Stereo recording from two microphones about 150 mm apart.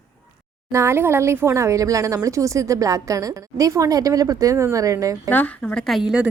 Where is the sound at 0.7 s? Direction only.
20° right (ahead or behind).